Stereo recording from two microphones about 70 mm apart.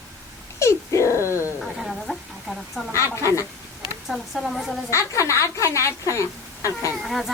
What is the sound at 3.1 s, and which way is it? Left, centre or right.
Speech, left.